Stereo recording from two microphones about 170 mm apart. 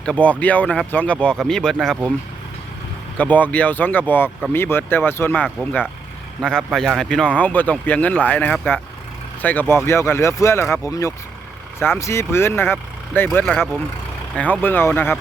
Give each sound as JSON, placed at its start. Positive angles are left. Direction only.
{"t": 0.0, "sound": "speech", "side_deg": 5}
{"t": 3.2, "sound": "speech", "side_deg": 10}